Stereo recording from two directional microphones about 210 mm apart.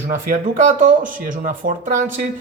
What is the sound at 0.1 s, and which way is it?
Speech, 40° right (ahead or behind).